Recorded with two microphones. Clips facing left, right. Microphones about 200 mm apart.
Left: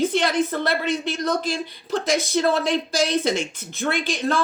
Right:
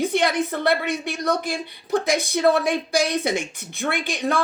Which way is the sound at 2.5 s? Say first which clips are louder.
Right 1 dB; 60° right (ahead or behind).